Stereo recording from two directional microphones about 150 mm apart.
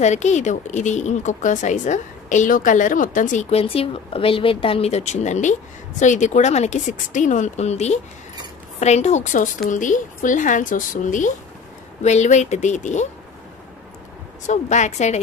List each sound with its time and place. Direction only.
0.0 s a woman's voice: 50° left (ahead or behind)
14.5 s a woman's voice: 50° left (ahead or behind)